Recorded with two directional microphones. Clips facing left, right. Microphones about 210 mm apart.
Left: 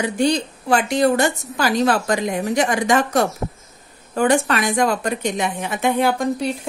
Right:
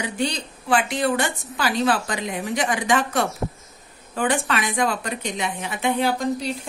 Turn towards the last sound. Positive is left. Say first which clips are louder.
# left 3 dB
turn(degrees=55)  # may be behind; listen again after turning